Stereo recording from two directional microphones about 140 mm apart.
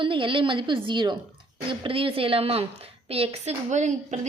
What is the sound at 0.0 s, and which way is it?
A woman's voice, 35° right (ahead or behind).